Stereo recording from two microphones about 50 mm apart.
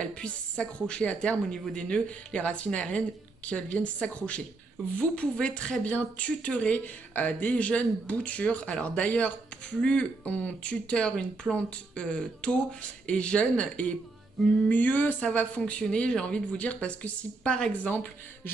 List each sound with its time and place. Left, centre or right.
0.0 s a woman's voice: left
6.8 s a woman's voice: left
14.7 s a woman's voice: left; by 17.7 s centre
17.8 s speech: left